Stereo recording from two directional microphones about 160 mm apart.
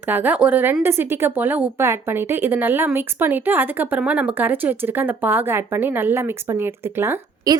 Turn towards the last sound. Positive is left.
turn(degrees=-25)  # may be behind; listen again after turning